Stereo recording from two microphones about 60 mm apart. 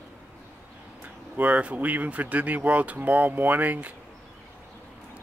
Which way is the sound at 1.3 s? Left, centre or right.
Right.